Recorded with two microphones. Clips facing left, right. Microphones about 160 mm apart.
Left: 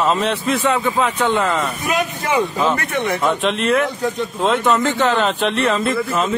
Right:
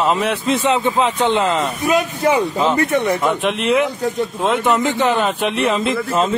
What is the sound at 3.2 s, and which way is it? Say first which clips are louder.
A man's voice: even; 10° right (ahead or behind).